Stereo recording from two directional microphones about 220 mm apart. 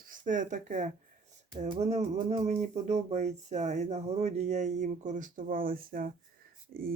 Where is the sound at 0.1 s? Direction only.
35° right (ahead or behind).